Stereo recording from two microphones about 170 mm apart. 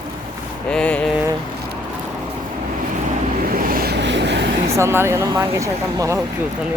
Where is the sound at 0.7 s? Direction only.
5° left (ahead or behind).